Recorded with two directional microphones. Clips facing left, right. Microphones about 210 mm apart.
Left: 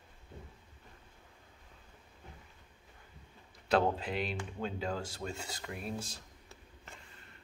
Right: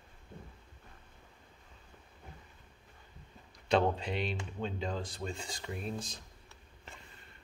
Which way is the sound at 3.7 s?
5° left (ahead or behind).